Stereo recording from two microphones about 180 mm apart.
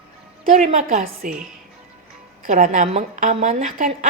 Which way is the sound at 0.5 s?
40° right (ahead or behind).